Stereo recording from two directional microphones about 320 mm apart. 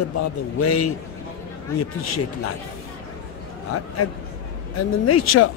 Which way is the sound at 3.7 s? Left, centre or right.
Left.